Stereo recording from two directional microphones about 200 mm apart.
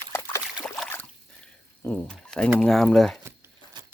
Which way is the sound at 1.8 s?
10° left (ahead or behind).